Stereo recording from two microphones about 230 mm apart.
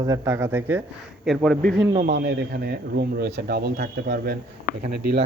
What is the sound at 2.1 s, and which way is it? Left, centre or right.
Speech, right.